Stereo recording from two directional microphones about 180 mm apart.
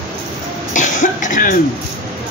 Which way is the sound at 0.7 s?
45° left (ahead or behind).